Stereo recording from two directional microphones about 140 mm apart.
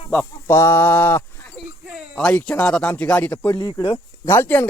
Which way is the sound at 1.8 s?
10° right (ahead or behind).